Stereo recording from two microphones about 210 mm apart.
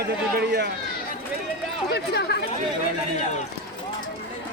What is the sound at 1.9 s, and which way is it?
Speech, 50° left (ahead or behind).